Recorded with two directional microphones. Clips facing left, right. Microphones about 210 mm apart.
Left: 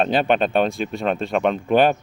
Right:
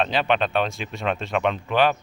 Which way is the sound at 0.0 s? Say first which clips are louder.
Left 4 dB; 50° left (ahead or behind).